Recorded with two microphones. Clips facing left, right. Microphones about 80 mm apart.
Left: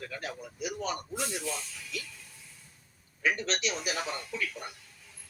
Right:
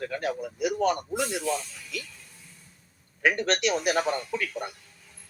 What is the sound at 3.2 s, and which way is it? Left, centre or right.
A man's voice, right.